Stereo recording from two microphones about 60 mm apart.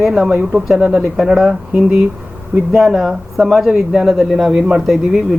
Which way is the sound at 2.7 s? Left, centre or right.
Centre.